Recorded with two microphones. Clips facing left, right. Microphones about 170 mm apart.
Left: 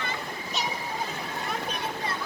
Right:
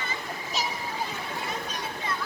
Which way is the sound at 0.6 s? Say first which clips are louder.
Even; centre (ahead or behind).